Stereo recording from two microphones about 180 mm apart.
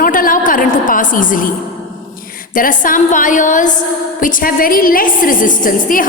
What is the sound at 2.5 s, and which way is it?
A woman's voice, 50° left (ahead or behind).